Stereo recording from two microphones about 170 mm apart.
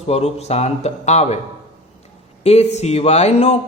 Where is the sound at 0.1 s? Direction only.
40° left (ahead or behind).